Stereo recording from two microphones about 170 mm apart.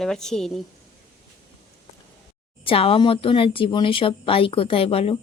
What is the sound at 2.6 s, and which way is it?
Speech, 35° left (ahead or behind).